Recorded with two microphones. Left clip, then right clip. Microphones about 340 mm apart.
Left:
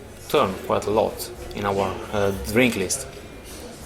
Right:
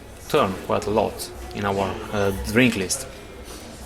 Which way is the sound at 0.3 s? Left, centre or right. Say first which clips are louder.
Even; right.